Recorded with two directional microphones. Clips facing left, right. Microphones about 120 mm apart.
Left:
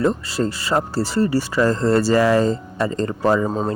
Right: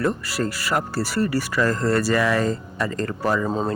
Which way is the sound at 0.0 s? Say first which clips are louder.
Left 4 dB; 25° left (ahead or behind).